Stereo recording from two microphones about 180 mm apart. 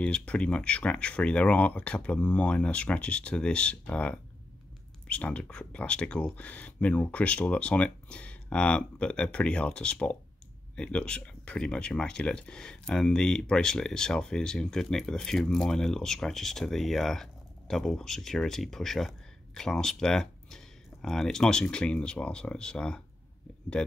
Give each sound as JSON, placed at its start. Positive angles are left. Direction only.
{"t": 0.0, "sound": "speech", "side_deg": 5}